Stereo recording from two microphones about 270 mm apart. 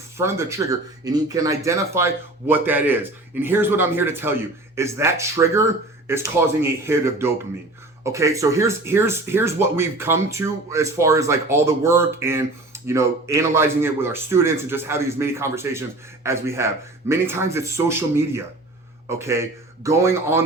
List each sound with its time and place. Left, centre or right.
0.2 s speech: centre